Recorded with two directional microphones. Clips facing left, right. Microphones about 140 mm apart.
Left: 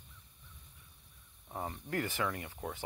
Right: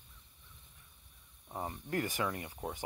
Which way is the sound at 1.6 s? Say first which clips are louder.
Right 1 dB; 20° right (ahead or behind).